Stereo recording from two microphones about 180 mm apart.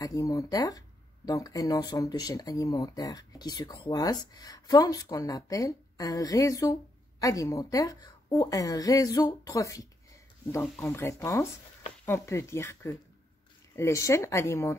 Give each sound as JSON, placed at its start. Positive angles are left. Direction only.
{"t": 0.0, "sound": "speech", "side_deg": 20}